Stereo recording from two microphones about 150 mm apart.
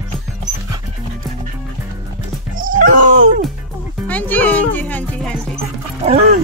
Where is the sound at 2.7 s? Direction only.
65° right (ahead or behind).